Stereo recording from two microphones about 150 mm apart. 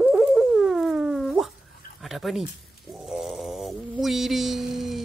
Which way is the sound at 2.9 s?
Centre (ahead or behind).